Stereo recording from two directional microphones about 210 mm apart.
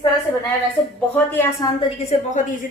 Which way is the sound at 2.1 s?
35° left (ahead or behind).